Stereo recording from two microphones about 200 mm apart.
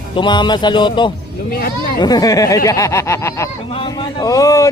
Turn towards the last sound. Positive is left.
turn(degrees=15)  # may be behind; listen again after turning